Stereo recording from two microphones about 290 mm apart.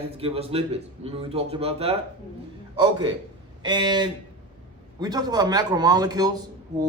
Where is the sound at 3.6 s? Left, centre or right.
Centre.